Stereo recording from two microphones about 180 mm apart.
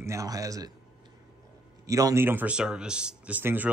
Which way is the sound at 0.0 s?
15° right (ahead or behind).